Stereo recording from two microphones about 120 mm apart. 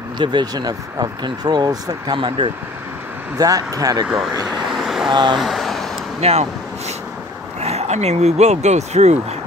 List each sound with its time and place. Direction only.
0.2 s speech: 35° right (ahead or behind)
3.3 s speech: 30° right (ahead or behind)
4.1 s vehicle: centre (ahead or behind)
5.1 s speech: 40° right (ahead or behind)
5.4 s vehicle: centre (ahead or behind)
6.2 s speech: 60° right (ahead or behind)
7.6 s speech: 60° right (ahead or behind)